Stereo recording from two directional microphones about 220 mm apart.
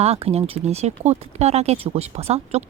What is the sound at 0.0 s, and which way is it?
Speech, 25° right (ahead or behind).